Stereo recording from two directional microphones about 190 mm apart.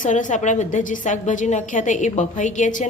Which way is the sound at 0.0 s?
40° left (ahead or behind).